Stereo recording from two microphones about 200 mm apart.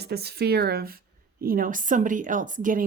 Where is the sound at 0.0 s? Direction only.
55° right (ahead or behind).